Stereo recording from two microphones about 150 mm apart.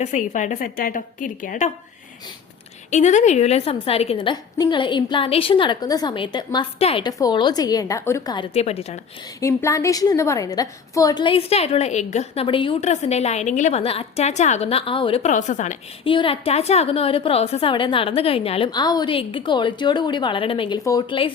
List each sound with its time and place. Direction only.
0.0 s a woman's voice: 55° left (ahead or behind)
2.9 s a woman's voice: 55° left (ahead or behind); by 4.4 s 40° left (ahead or behind)
4.5 s a woman's voice: 30° left (ahead or behind)
7.0 s a woman's voice: 25° left (ahead or behind)
8.5 s a woman's voice: 45° left (ahead or behind)
9.4 s a woman's voice: 20° left (ahead or behind); by 12.7 s 35° left (ahead or behind)
12.8 s a woman's voice: 50° left (ahead or behind)
15.2 s a woman's voice: 55° left (ahead or behind)
16.0 s a woman's voice: 35° left (ahead or behind)
18.7 s a woman's voice: 30° left (ahead or behind)